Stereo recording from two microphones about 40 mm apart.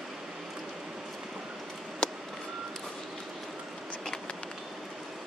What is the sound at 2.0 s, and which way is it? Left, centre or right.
Reversing beeps, left.